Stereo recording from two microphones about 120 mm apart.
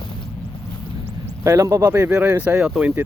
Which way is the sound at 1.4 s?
25° right (ahead or behind).